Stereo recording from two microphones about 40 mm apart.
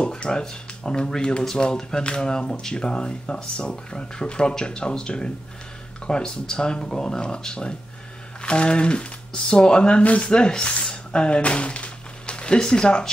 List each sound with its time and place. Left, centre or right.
0.0 s speech: left
10.0 s speech: left
10.3 s speech: left